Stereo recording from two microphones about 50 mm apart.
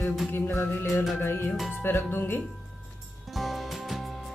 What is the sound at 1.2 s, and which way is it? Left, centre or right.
Music, left.